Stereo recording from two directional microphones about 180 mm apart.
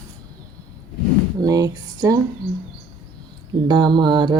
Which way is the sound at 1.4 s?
20° right (ahead or behind).